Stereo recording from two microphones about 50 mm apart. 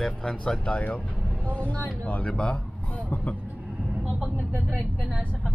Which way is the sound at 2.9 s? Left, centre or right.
Left.